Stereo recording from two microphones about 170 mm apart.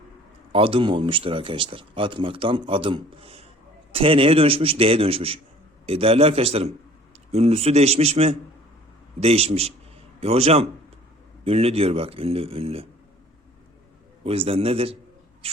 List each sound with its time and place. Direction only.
0.5 s speech: 30° right (ahead or behind)
14.3 s speech: 35° right (ahead or behind)